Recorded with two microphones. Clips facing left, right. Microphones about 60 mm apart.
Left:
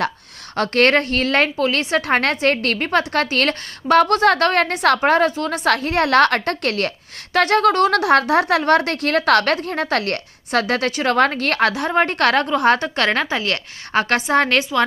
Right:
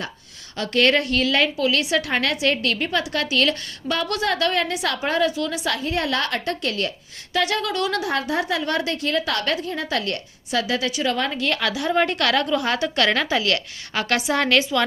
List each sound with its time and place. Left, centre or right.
0.5 s a woman's voice: left
11.9 s a woman's voice: left